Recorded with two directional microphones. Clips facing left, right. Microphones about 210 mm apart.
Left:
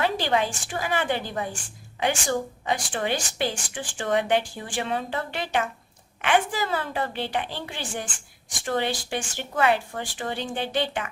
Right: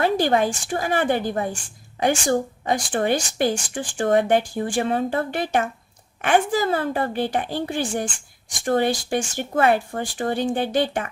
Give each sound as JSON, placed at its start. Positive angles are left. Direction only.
{"t": 0.0, "sound": "a woman's voice", "side_deg": -45}